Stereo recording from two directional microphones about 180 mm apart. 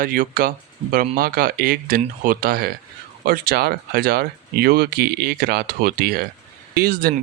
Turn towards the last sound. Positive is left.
turn(degrees=-55)  # may be behind; listen again after turning